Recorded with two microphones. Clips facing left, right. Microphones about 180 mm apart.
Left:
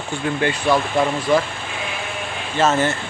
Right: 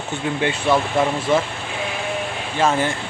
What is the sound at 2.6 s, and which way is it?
Speech, 10° right (ahead or behind).